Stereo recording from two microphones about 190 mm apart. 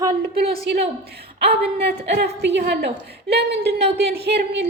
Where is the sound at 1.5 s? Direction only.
60° right (ahead or behind).